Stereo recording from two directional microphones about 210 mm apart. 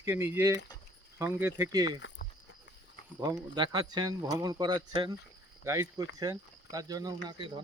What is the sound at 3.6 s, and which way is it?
Speech, 20° right (ahead or behind).